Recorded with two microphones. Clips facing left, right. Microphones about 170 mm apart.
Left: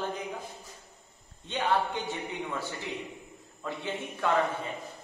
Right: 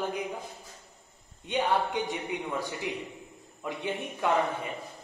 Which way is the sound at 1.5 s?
15° right (ahead or behind).